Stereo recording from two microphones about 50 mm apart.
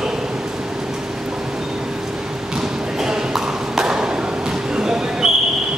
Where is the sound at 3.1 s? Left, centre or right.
Centre.